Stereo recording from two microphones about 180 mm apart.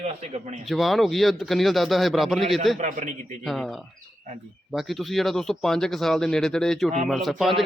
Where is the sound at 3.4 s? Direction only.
Centre (ahead or behind).